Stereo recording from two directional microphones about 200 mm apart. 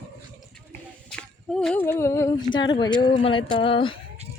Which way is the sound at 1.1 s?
5° left (ahead or behind).